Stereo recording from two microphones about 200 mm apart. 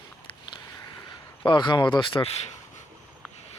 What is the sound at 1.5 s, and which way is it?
Speech, 25° left (ahead or behind).